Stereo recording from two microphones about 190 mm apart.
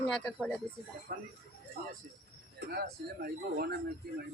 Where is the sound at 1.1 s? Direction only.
50° right (ahead or behind).